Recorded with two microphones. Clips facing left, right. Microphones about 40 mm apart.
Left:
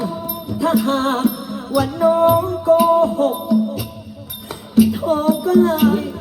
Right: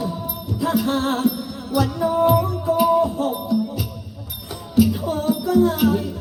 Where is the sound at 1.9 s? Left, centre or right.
Left.